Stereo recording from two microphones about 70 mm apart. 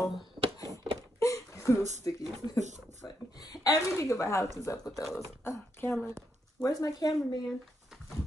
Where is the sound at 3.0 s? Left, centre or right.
Left.